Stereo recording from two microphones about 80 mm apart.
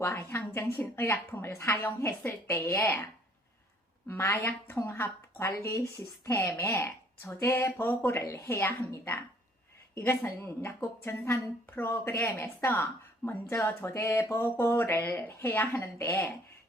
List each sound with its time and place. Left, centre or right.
0.0 s a woman's voice: left